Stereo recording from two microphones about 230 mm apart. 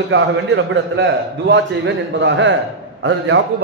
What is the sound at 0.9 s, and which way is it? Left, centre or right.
A man's voice, right.